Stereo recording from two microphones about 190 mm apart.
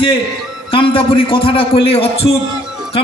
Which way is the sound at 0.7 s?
30° left (ahead or behind).